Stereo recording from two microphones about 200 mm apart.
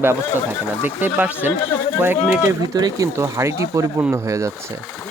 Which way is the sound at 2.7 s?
15° right (ahead or behind).